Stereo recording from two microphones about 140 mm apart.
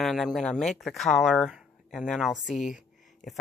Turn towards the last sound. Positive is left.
turn(degrees=0)  # may be behind; listen again after turning